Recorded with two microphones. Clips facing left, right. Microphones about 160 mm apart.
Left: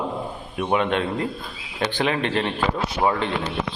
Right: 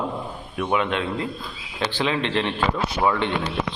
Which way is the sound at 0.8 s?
45° left (ahead or behind).